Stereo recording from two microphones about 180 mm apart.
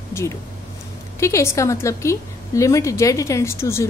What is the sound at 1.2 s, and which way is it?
A woman's voice, 15° left (ahead or behind).